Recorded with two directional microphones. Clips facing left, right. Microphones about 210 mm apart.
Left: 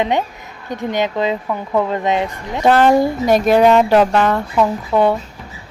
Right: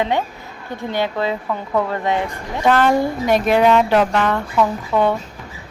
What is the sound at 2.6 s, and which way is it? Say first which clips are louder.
Speech: left 3 dB; 35° left (ahead or behind).